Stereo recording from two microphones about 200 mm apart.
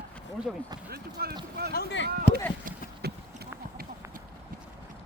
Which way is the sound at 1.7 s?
65° left (ahead or behind).